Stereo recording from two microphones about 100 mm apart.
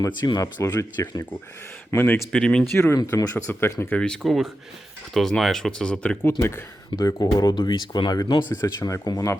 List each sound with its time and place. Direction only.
0.0 s speech: 40° left (ahead or behind)
2.0 s speech: 10° left (ahead or behind)
2.7 s speech: 35° left (ahead or behind)
3.4 s speech: 25° left (ahead or behind)
3.9 s speech: 10° left (ahead or behind)
6.4 s speech: 30° left (ahead or behind)